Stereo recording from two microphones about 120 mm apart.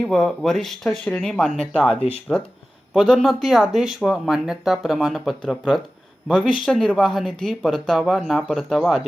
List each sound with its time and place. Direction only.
0.0 s speech: 5° left (ahead or behind)
2.0 s speech: 55° left (ahead or behind)
2.9 s speech: centre (ahead or behind)